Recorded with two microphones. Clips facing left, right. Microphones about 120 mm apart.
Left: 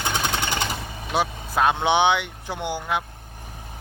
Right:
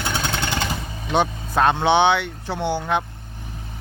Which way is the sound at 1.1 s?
5° left (ahead or behind).